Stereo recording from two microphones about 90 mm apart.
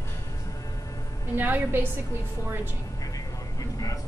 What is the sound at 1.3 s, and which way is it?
Speech, 20° right (ahead or behind).